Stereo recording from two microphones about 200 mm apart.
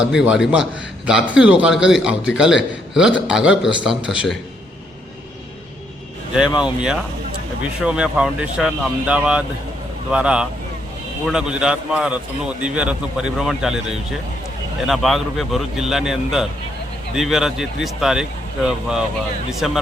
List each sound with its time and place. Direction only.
0.0 s a man's voice: 5° right (ahead or behind)
6.4 s speech: 20° left (ahead or behind)
7.8 s a man's voice: 5° right (ahead or behind)
14.8 s a man's voice: centre (ahead or behind)